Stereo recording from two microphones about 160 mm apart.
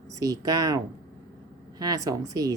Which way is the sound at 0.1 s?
20° right (ahead or behind).